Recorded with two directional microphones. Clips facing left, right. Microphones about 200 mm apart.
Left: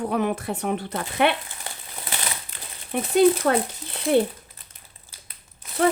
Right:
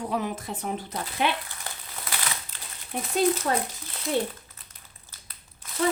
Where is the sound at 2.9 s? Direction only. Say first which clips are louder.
Left 7 dB; 65° left (ahead or behind).